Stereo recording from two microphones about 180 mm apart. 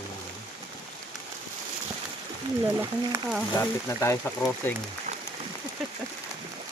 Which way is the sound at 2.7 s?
5° right (ahead or behind).